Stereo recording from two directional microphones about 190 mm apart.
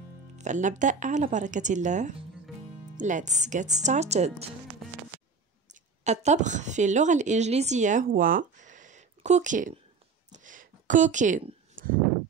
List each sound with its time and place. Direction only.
0.4 s a woman's voice: 40° right (ahead or behind)
5.7 s speech: 40° right (ahead or behind)
10.3 s a sound: 45° right (ahead or behind)